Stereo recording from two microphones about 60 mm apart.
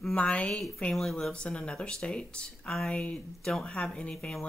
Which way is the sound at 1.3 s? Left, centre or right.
Centre.